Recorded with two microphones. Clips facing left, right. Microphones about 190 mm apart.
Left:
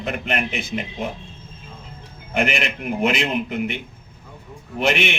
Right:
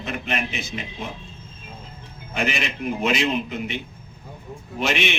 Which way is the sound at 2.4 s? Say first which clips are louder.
Left 3 dB; 55° left (ahead or behind).